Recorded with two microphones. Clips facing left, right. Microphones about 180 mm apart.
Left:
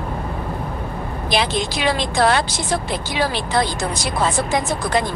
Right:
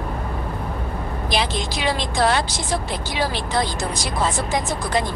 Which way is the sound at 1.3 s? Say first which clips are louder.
Left 4 dB; 65° left (ahead or behind).